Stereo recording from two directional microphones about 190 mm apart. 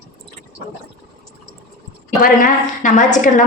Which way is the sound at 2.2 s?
45° left (ahead or behind).